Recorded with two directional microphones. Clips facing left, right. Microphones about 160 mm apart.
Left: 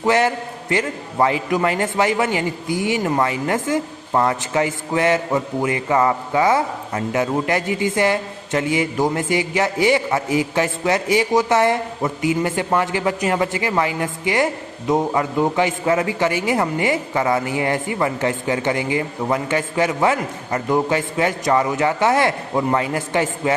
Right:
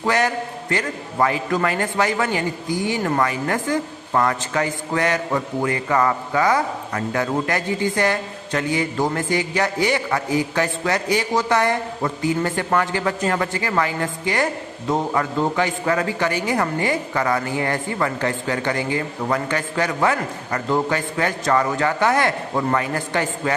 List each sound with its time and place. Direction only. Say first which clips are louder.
0.0 s a man's voice: left 3 dB; 20° left (ahead or behind)